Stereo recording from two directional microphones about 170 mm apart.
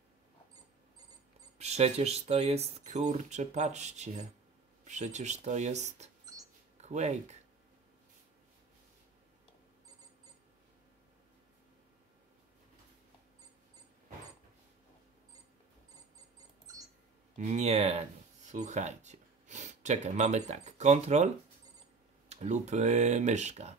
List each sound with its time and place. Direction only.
1.6 s speech: 40° right (ahead or behind)
16.3 s a sound: 20° right (ahead or behind)
17.4 s speech: 40° right (ahead or behind)
22.3 s speech: 40° right (ahead or behind)